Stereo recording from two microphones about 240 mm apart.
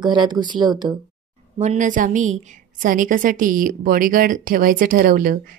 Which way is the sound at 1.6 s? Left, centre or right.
Right.